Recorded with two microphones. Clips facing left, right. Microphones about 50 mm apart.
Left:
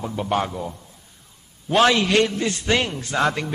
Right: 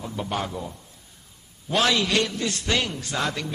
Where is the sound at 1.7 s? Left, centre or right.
Left.